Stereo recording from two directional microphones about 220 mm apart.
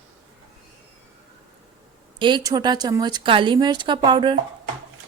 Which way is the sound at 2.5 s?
20° right (ahead or behind).